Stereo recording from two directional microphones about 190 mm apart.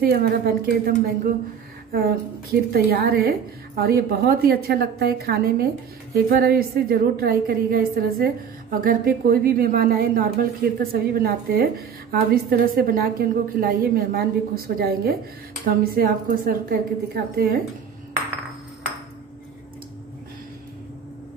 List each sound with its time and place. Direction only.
0.0 s a woman's voice: 55° right (ahead or behind)
2.7 s a woman's voice: 55° right (ahead or behind)